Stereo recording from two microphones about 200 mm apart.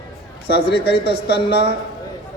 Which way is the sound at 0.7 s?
55° left (ahead or behind).